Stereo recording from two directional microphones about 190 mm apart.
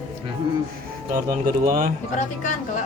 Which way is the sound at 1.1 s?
45° right (ahead or behind).